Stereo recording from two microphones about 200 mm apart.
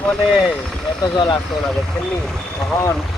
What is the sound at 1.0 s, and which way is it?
Speech, 20° left (ahead or behind).